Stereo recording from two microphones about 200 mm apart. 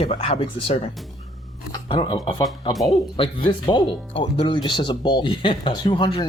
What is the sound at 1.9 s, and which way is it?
Speech, 25° left (ahead or behind).